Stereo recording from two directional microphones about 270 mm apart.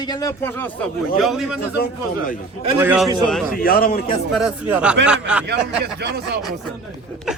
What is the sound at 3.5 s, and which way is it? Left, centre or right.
Speech, left.